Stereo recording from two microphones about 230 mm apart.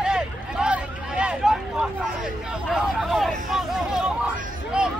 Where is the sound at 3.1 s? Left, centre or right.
Centre.